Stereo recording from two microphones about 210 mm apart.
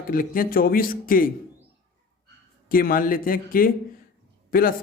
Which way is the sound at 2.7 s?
45° left (ahead or behind).